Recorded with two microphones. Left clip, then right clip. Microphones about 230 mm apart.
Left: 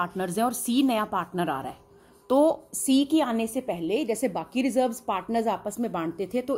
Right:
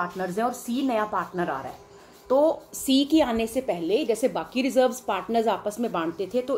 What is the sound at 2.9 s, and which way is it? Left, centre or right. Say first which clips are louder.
A woman's voice: right 2 dB; left.